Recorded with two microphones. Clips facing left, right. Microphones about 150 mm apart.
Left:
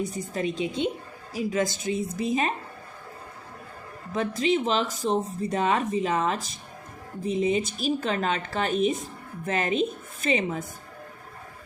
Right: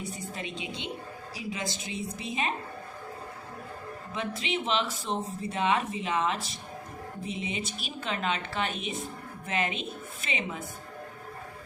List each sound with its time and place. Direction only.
0.0 s a woman's voice: 40° left (ahead or behind)
4.1 s speech: 40° left (ahead or behind)